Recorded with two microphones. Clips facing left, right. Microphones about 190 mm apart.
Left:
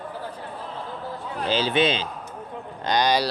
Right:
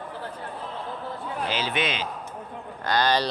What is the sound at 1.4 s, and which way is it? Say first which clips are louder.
Speech: left 7 dB; 30° left (ahead or behind).